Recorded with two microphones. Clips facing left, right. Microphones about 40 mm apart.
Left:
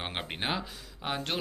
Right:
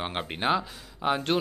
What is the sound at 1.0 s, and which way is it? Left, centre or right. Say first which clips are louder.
Speech: right 8 dB; centre.